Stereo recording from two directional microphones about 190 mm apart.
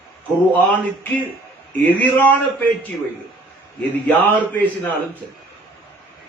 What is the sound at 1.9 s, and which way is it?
A man's voice, 10° left (ahead or behind).